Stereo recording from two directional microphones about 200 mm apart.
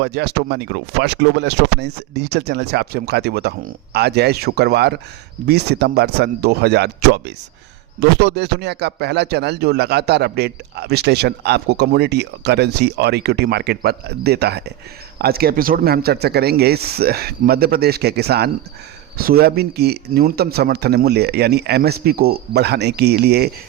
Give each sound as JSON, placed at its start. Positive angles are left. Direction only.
{"t": 0.0, "sound": "a man's voice", "side_deg": -55}